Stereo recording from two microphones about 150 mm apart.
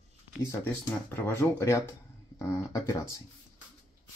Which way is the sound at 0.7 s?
15° left (ahead or behind).